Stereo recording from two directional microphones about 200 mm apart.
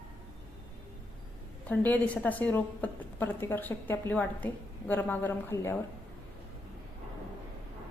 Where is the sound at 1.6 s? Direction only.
5° left (ahead or behind).